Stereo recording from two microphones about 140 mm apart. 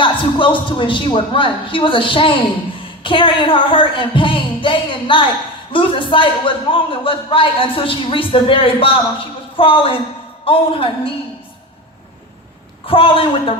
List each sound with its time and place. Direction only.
0.0 s a man's voice: 35° left (ahead or behind)
12.9 s a man's voice: 40° left (ahead or behind)